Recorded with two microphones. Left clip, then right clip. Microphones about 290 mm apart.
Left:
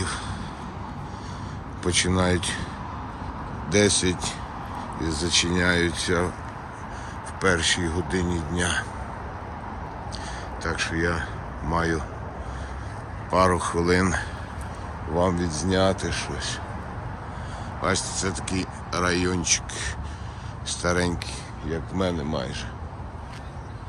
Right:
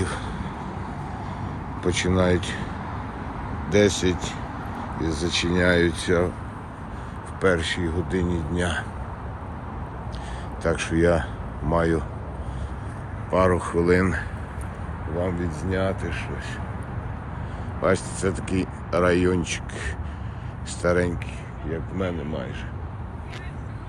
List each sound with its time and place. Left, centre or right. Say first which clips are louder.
1.8 s speech: right 1 dB; centre
3.7 s speech: right 1 dB; centre
7.4 s speech: even; centre
10.6 s speech: right 4 dB; centre
13.3 s speech: even; centre
17.8 s speech: right 3 dB; centre